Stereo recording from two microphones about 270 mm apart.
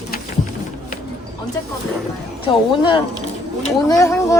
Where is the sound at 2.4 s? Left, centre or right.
Centre.